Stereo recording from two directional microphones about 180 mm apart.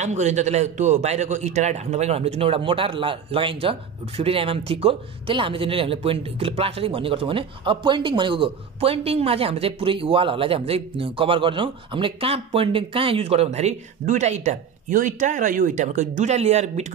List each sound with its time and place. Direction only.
0.0 s speech: 40° right (ahead or behind)